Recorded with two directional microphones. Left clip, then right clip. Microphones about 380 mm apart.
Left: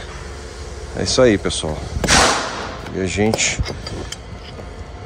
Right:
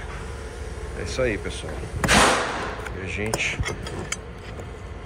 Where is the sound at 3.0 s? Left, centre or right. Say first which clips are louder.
Left 11 dB; left.